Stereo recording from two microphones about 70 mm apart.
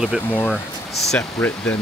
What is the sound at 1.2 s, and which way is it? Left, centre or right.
Speech, left.